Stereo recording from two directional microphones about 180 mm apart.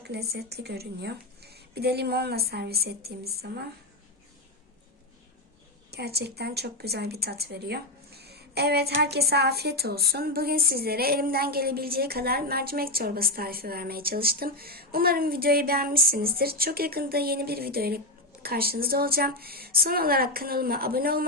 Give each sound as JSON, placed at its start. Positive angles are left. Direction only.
{"t": 0.0, "sound": "a woman's voice", "side_deg": -65}
{"t": 5.9, "sound": "a woman's voice", "side_deg": -65}